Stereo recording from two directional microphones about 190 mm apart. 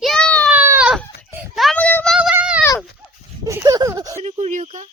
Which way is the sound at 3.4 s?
15° right (ahead or behind).